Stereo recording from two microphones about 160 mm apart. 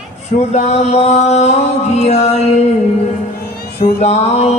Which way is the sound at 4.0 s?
45° left (ahead or behind).